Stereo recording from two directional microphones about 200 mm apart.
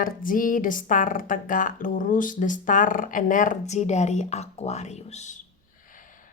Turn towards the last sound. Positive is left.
turn(degrees=40)  # may be behind; listen again after turning